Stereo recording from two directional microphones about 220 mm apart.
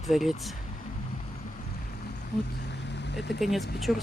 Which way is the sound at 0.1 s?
Centre (ahead or behind).